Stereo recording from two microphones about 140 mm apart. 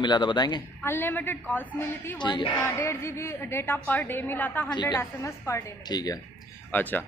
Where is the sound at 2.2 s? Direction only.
35° left (ahead or behind).